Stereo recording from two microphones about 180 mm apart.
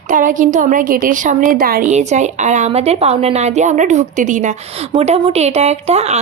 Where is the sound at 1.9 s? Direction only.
40° right (ahead or behind).